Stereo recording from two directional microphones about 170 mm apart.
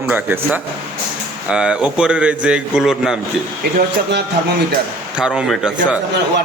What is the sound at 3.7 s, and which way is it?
Speech, 75° right (ahead or behind).